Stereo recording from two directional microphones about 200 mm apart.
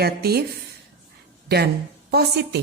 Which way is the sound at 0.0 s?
50° right (ahead or behind).